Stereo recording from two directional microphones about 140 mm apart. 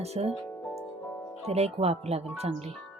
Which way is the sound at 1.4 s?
45° right (ahead or behind).